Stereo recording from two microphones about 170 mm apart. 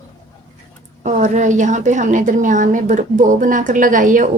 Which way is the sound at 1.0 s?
45° right (ahead or behind).